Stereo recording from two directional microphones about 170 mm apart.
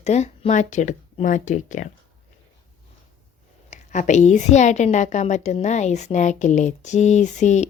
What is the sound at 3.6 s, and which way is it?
Speech, 45° left (ahead or behind).